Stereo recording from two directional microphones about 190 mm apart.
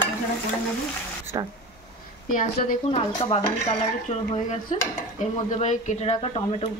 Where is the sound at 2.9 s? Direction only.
30° left (ahead or behind).